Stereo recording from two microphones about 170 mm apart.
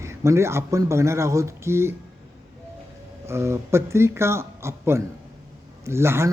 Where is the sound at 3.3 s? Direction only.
15° right (ahead or behind).